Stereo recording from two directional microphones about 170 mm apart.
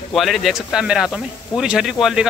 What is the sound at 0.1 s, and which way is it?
Speech, centre (ahead or behind).